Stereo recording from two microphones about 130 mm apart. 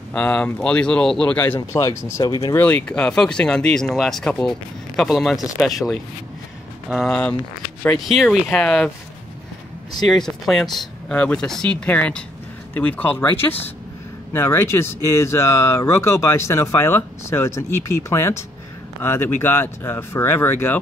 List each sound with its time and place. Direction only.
0.1 s speech: 10° left (ahead or behind); by 2.5 s 25° left (ahead or behind)
2.5 s speech: 15° left (ahead or behind)
10.0 s speech: 5° left (ahead or behind)